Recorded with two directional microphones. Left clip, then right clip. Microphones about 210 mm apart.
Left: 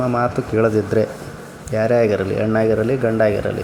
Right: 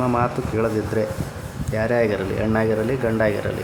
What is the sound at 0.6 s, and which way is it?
Speech, 15° left (ahead or behind).